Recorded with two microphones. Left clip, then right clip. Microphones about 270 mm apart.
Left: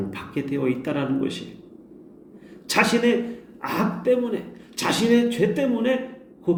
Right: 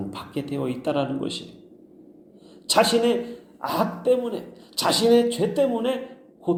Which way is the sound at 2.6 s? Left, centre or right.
Centre.